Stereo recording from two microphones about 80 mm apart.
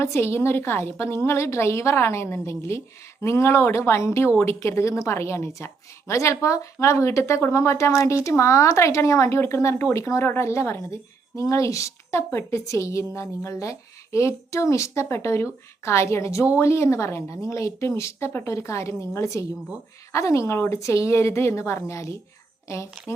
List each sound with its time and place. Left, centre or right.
0.0 s a woman's voice: left